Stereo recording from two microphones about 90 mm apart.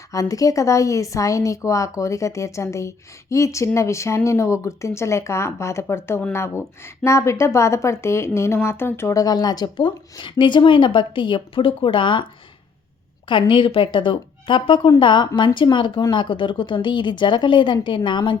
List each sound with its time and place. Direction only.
0.1 s speech: 40° left (ahead or behind); by 12.2 s 65° left (ahead or behind)
13.5 s a woman's voice: 70° left (ahead or behind)